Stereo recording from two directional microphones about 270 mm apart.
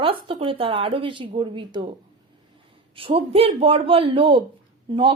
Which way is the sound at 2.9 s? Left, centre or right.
Right.